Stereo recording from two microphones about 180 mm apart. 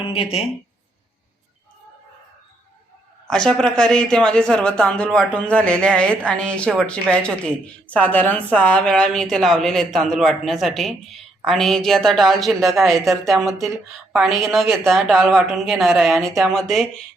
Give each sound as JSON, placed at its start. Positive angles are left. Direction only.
{"t": 0.0, "sound": "speech", "side_deg": 30}
{"t": 3.2, "sound": "speech", "side_deg": 5}